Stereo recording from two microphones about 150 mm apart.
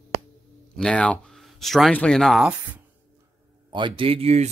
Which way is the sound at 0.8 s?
5° left (ahead or behind).